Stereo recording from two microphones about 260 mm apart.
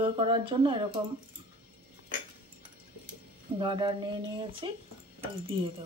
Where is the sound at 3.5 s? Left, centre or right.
Centre.